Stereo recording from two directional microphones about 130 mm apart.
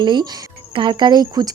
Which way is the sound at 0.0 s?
35° right (ahead or behind).